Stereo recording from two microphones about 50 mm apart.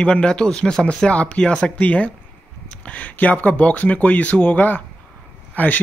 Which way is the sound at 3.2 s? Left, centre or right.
Left.